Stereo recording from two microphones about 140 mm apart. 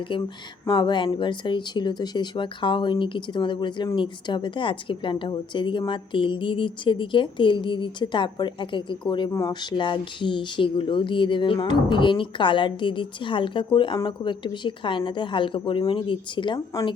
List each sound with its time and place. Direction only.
0.7 s speech: 35° left (ahead or behind)
9.3 s speech: 25° left (ahead or behind)
9.7 s speech: 35° left (ahead or behind)